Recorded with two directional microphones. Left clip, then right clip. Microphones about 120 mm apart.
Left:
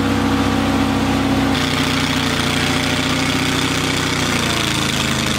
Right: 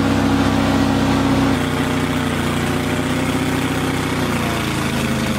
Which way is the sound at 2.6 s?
25° left (ahead or behind).